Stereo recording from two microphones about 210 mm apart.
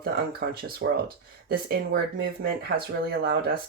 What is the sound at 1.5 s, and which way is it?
Speech, 45° right (ahead or behind).